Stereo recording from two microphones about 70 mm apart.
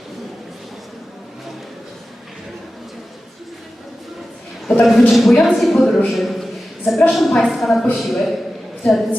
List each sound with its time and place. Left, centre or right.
4.6 s a man's voice: centre
6.1 s a sound: centre
7.1 s a man's voice: centre